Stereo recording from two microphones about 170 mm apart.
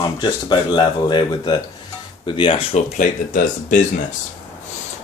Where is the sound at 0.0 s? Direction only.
25° left (ahead or behind).